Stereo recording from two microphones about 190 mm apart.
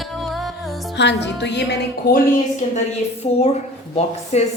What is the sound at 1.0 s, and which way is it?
Music, 65° left (ahead or behind).